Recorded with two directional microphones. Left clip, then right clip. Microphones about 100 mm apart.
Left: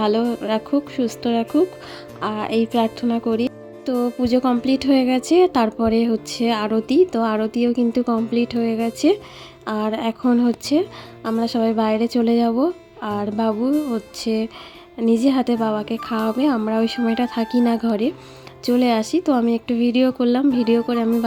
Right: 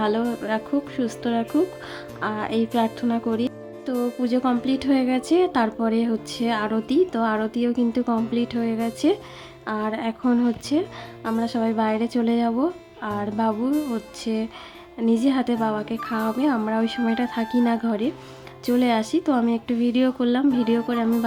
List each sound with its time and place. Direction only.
0.0 s a woman's voice: 35° left (ahead or behind)
13.7 s speech: centre (ahead or behind)
14.2 s speech: 35° left (ahead or behind)